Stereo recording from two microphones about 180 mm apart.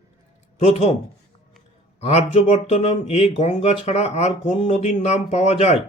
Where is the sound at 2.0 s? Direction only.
35° left (ahead or behind).